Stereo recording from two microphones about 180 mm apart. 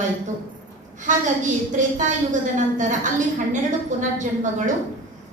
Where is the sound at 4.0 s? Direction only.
45° right (ahead or behind).